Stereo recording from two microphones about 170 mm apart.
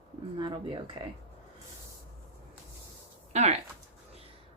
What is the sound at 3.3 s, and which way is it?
Speech, 40° right (ahead or behind).